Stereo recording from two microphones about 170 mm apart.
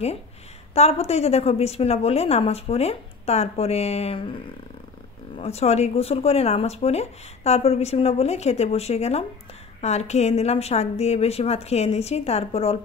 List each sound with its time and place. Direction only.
0.7 s speech: 40° left (ahead or behind)
5.4 s speech: 40° left (ahead or behind)